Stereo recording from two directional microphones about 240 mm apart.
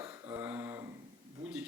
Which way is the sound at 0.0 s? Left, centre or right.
Centre.